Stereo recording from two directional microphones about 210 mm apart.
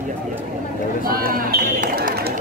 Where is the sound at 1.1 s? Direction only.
45° right (ahead or behind).